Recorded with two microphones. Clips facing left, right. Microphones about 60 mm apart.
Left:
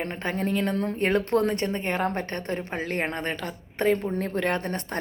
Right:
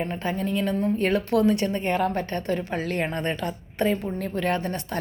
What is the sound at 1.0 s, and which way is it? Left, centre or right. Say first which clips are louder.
A woman's voice: right 1 dB; left.